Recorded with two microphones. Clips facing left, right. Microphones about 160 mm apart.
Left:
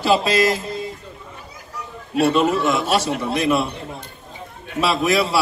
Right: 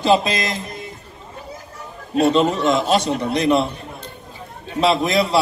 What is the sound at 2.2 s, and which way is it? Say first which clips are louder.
A man's voice: right 1 dB; 20° right (ahead or behind).